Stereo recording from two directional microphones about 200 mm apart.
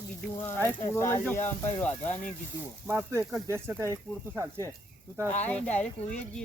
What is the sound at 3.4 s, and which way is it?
Speech, 15° right (ahead or behind).